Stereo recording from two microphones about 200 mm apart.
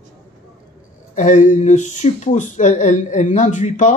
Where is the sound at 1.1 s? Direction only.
40° left (ahead or behind).